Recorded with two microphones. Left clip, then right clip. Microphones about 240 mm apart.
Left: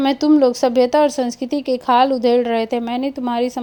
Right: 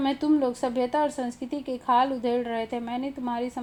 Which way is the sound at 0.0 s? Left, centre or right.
Left.